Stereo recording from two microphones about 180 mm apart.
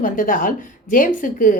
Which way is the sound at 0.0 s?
50° left (ahead or behind).